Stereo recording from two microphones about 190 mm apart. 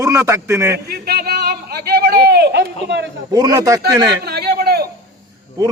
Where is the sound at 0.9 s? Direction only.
55° right (ahead or behind).